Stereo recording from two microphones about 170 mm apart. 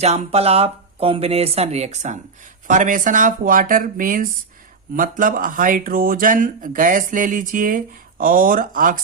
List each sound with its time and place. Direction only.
0.0 s speech: 40° right (ahead or behind)